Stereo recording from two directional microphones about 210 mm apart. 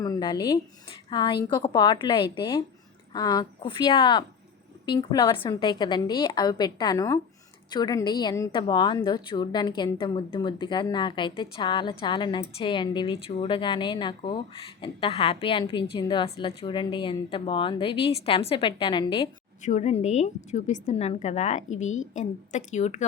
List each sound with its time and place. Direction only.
0.0 s speech: 20° left (ahead or behind)
19.6 s a woman's voice: 35° left (ahead or behind)